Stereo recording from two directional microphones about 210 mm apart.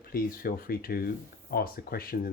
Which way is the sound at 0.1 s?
45° left (ahead or behind).